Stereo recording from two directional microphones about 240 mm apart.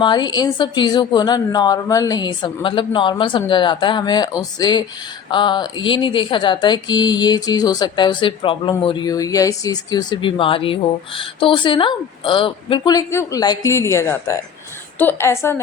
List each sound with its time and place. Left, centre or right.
0.0 s a woman's voice: centre